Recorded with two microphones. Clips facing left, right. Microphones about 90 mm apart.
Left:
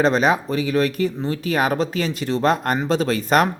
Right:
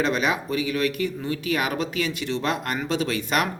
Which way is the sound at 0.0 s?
35° left (ahead or behind).